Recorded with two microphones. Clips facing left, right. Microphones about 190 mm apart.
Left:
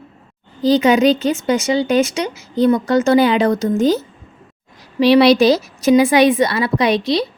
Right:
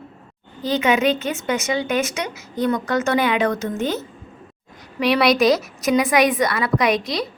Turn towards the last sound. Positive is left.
turn(degrees=30)  # may be behind; listen again after turning